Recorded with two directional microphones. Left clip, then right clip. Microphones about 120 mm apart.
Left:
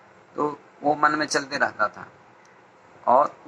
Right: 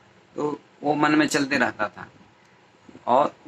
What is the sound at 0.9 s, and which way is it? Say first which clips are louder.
A man's voice: even; 35° right (ahead or behind).